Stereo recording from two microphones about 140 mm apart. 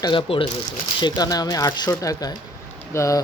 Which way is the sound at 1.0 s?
30° left (ahead or behind).